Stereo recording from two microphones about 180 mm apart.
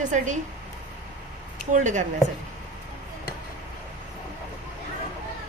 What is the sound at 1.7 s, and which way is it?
Speech, 45° right (ahead or behind).